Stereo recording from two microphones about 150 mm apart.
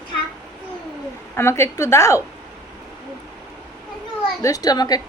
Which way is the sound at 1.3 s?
15° left (ahead or behind).